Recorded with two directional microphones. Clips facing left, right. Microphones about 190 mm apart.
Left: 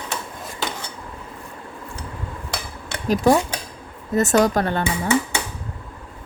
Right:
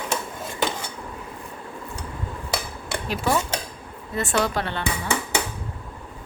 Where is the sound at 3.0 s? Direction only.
40° left (ahead or behind).